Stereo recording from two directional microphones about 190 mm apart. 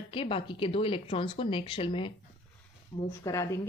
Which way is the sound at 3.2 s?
15° left (ahead or behind).